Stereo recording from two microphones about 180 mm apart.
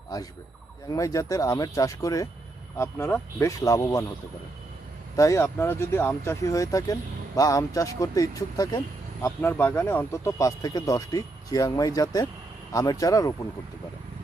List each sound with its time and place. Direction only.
0.1 s speech: 20° left (ahead or behind)
5.1 s speech: 15° left (ahead or behind)